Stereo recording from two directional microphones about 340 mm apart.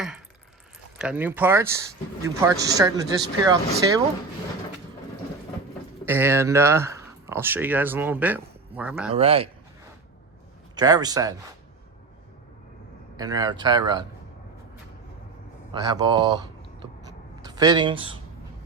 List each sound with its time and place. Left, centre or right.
0.9 s speech: centre
6.1 s speech: centre
9.1 s speech: centre
10.8 s speech: centre
13.1 s speech: centre
15.7 s speech: centre
17.4 s speech: centre